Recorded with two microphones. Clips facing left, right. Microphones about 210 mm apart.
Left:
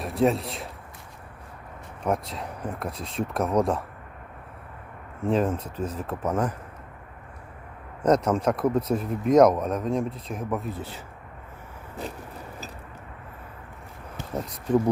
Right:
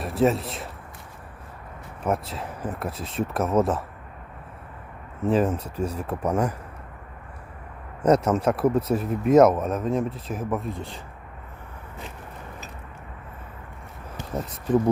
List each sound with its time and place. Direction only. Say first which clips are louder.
0.0 s speech: right 1 dB; centre (ahead or behind)
2.0 s speech: right 1 dB; 5° right (ahead or behind)
5.2 s speech: right 2 dB; 5° right (ahead or behind)
8.0 s speech: right 2 dB; 10° right (ahead or behind)